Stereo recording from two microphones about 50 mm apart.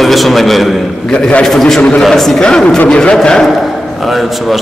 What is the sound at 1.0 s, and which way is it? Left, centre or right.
Speech, centre.